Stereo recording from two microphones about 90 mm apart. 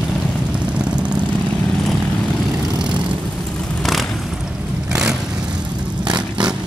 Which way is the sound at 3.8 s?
Centre (ahead or behind).